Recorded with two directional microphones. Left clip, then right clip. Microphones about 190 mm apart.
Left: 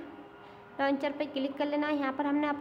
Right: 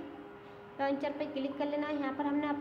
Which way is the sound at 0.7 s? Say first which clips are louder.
Left 3 dB; 25° left (ahead or behind).